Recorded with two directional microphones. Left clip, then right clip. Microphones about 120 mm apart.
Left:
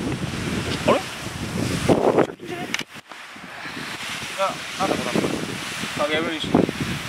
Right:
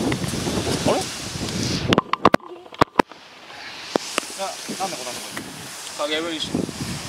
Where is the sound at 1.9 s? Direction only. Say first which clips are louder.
Even; 30° left (ahead or behind).